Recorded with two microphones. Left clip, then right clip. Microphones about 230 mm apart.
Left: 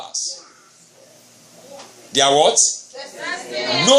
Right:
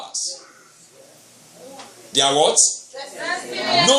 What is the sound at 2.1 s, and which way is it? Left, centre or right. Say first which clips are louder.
Speech: left 2 dB; left.